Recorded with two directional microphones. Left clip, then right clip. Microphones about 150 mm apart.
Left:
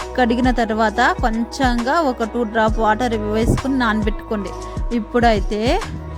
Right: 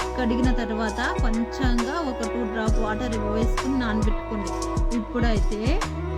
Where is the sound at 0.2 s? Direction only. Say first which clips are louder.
Left 11 dB; 65° left (ahead or behind).